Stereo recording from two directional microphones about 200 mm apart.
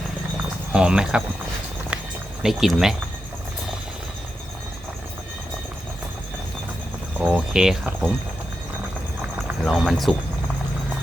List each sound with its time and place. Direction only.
0.7 s speech: 5° right (ahead or behind)
1.9 s walk: 5° right (ahead or behind)
2.4 s speech: centre (ahead or behind)
7.2 s speech: 5° right (ahead or behind)
9.5 s speech: centre (ahead or behind)